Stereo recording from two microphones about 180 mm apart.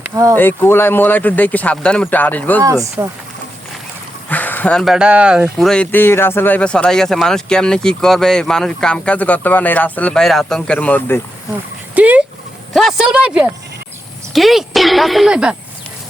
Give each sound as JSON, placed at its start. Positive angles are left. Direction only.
{"t": 0.0, "sound": "speech", "side_deg": -15}
{"t": 0.3, "sound": "speech", "side_deg": 10}
{"t": 3.0, "sound": "speech", "side_deg": -10}
{"t": 4.3, "sound": "speech", "side_deg": 10}
{"t": 11.9, "sound": "vehicle", "side_deg": -10}
{"t": 12.7, "sound": "speech", "side_deg": 0}